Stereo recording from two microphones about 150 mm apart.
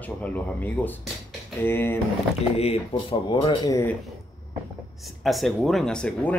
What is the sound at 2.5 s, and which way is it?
Speech, 40° left (ahead or behind).